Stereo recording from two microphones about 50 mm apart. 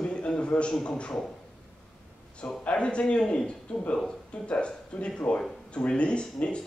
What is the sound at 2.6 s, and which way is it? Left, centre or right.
A man's voice, left.